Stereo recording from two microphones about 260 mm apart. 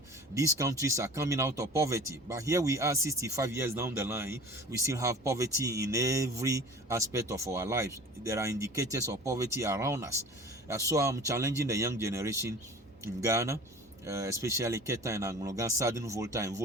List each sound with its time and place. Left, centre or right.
0.3 s speech: centre